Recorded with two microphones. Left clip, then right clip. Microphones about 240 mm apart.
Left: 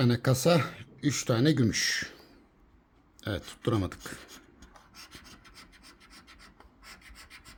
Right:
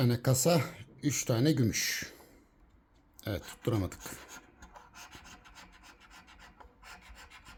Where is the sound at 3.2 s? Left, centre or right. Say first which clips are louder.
Left 3 dB; centre.